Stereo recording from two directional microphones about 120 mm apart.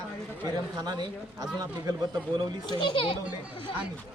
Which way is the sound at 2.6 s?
35° left (ahead or behind).